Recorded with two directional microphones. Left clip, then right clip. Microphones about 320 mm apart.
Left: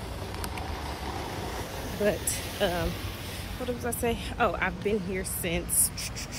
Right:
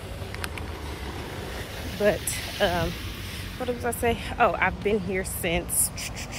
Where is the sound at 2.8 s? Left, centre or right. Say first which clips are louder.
Right 2 dB; centre.